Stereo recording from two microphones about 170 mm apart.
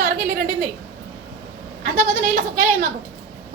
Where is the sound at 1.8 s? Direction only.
50° right (ahead or behind).